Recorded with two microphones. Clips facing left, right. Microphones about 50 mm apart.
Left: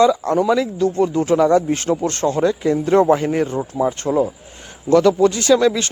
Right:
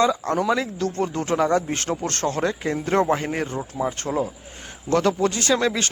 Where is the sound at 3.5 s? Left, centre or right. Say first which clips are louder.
Left 6 dB; left.